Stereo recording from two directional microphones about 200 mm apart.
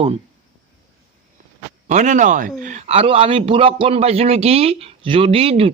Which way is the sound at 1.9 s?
35° right (ahead or behind).